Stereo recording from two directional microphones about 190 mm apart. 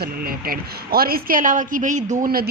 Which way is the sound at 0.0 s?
50° right (ahead or behind).